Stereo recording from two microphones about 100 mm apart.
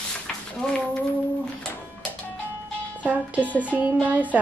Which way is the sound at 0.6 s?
5° left (ahead or behind).